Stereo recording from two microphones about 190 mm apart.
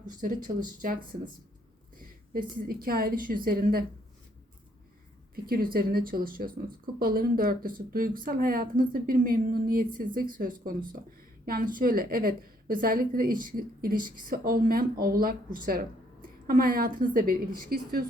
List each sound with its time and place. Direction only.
0.2 s a woman's voice: 45° right (ahead or behind)
5.5 s a woman's voice: 50° right (ahead or behind)
16.5 s a woman's voice: 50° right (ahead or behind)